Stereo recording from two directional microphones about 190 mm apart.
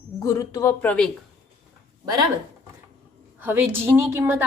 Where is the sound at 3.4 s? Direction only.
10° right (ahead or behind).